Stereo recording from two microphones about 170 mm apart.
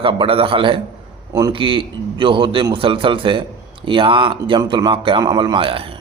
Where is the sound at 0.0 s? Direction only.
30° right (ahead or behind).